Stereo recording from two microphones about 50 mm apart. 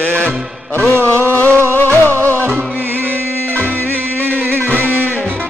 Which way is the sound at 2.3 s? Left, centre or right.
Right.